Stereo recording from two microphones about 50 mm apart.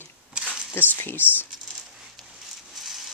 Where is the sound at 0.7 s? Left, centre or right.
Left.